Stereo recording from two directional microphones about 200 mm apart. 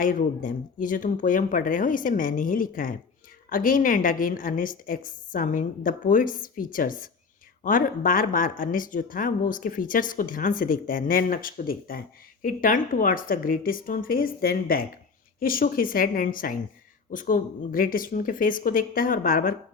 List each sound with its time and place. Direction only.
0.0 s speech: 45° left (ahead or behind)